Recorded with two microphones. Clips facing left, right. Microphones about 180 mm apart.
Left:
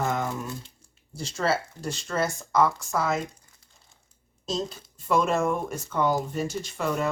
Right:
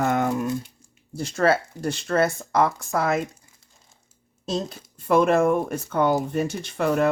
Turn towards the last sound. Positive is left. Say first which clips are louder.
# right 5 dB
turn(degrees=-60)  # may be behind; listen again after turning